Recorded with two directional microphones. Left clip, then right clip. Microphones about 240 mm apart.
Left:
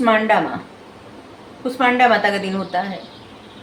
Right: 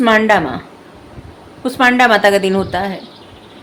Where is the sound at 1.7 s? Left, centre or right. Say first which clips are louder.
Right 4 dB; right.